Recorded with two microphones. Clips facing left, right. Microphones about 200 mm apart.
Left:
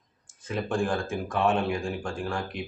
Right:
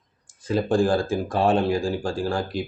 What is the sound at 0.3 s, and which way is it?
Speech, 35° right (ahead or behind).